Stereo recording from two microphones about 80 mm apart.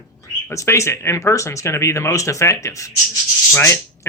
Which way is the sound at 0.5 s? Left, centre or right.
Left.